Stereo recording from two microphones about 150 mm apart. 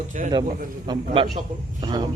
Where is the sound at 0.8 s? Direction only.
35° right (ahead or behind).